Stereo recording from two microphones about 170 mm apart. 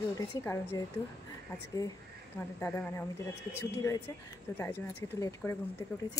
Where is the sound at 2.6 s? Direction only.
15° left (ahead or behind).